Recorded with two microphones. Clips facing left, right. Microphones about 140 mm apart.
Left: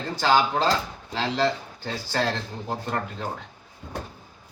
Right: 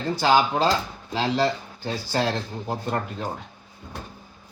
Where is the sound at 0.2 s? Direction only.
15° right (ahead or behind).